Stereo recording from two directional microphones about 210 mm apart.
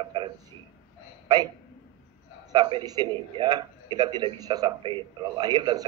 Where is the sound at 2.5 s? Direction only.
20° right (ahead or behind).